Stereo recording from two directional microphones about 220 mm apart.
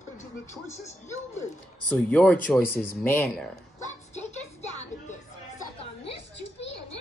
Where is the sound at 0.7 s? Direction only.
30° left (ahead or behind).